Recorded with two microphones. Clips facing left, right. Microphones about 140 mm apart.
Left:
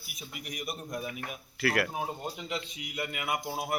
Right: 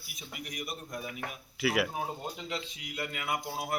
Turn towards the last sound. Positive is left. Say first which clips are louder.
# left 1 dB
turn(degrees=20)  # may be behind; listen again after turning